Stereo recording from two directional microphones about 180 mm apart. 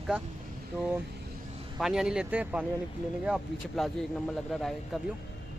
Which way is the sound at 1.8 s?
5° right (ahead or behind).